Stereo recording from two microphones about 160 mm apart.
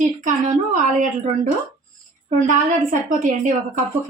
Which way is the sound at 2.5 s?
55° right (ahead or behind).